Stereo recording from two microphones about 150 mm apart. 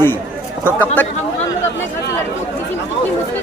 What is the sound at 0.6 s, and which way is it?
Speech, 10° left (ahead or behind).